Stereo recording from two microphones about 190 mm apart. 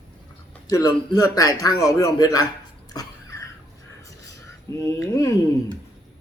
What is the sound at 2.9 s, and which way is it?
Cough, 20° left (ahead or behind).